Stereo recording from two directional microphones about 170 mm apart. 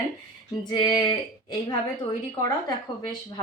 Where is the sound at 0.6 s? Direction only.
25° left (ahead or behind).